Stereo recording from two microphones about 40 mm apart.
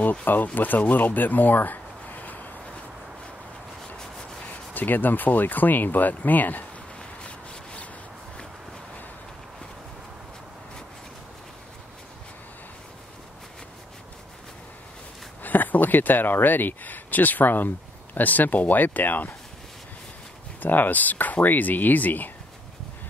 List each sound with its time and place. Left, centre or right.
0.2 s speech: left
4.5 s speech: left
7.2 s rub: left
15.4 s speech: left
20.6 s speech: left